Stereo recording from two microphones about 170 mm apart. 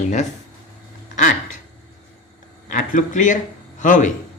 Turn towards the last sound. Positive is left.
turn(degrees=50)  # may be behind; listen again after turning